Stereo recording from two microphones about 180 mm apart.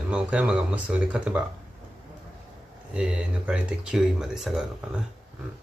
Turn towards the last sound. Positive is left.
turn(degrees=0)  # may be behind; listen again after turning